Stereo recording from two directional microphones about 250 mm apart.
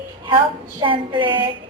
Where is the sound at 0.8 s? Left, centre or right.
Centre.